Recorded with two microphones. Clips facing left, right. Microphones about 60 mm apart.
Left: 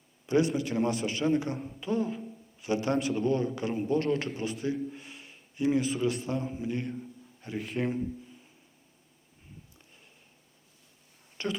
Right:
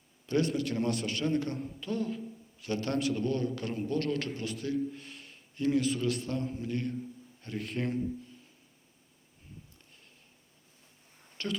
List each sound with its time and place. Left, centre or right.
0.3 s a man's voice: centre
11.4 s speech: centre